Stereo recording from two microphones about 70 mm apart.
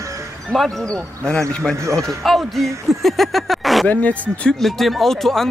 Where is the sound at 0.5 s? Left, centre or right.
Centre.